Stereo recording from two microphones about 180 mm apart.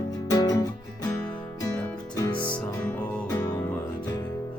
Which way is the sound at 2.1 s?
20° left (ahead or behind).